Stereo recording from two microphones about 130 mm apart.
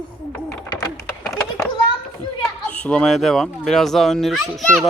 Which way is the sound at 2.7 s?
10° left (ahead or behind).